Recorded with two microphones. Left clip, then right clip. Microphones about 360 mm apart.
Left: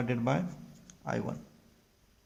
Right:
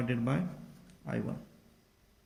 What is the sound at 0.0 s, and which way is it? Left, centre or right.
Speech, centre.